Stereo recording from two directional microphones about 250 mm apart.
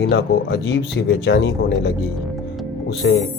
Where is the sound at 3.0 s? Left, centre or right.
Left.